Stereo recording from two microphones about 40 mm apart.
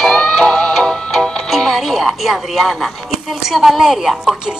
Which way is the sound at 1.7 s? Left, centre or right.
Centre.